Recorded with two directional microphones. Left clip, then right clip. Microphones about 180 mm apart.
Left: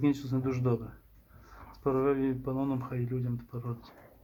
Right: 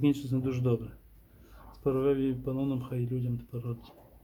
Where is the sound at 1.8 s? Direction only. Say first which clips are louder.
Even; 15° right (ahead or behind).